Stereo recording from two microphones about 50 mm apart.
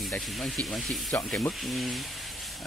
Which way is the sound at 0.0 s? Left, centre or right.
Centre.